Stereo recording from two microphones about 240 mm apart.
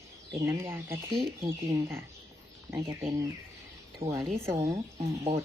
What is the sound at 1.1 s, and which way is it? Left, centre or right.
Speech, right.